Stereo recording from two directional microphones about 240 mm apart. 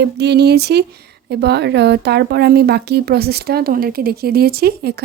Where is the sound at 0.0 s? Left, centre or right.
Right.